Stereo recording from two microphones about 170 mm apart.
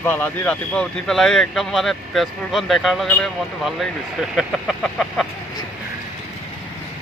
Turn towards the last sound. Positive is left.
turn(degrees=0)  # may be behind; listen again after turning